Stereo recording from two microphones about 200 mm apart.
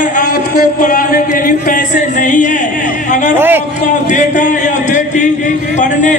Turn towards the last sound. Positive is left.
turn(degrees=40)  # may be behind; listen again after turning